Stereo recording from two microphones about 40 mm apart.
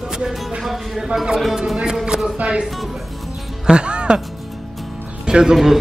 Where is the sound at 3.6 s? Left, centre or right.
Right.